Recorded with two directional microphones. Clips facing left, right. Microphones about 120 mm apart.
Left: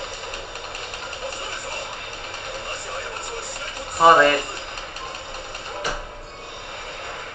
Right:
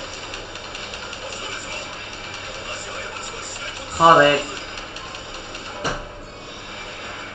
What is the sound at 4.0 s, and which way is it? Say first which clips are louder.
Speech: right 1 dB; 15° right (ahead or behind).